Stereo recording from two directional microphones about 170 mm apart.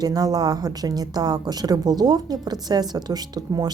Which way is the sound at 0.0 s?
25° right (ahead or behind).